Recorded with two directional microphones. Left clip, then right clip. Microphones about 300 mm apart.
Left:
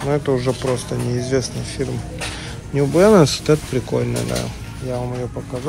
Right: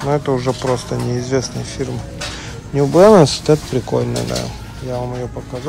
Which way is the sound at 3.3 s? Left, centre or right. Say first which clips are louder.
Right 3 dB; centre.